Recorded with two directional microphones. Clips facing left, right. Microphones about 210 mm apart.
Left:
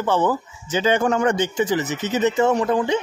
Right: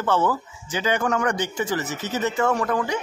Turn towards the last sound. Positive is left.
turn(degrees=25)  # may be behind; listen again after turning